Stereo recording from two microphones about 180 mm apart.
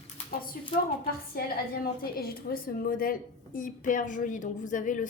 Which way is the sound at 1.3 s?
55° left (ahead or behind).